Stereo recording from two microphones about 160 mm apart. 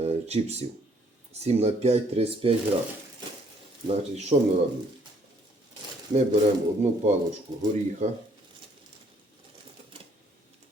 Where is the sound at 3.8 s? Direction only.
45° right (ahead or behind).